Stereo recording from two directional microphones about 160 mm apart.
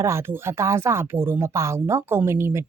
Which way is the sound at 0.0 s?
15° right (ahead or behind).